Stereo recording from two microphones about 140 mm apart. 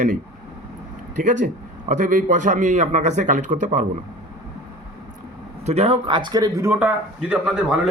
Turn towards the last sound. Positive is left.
turn(degrees=-5)  # may be behind; listen again after turning